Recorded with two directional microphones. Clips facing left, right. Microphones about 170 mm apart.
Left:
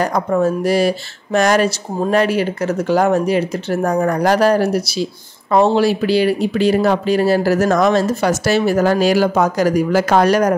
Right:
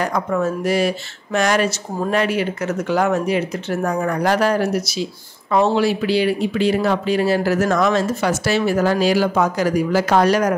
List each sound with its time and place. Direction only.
0.0 s speech: 35° left (ahead or behind)